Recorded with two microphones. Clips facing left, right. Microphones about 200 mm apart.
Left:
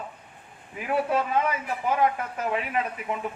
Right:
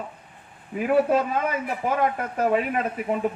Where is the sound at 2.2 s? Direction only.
45° right (ahead or behind).